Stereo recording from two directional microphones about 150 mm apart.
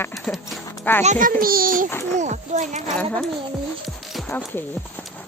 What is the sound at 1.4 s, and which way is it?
Speech, 75° right (ahead or behind).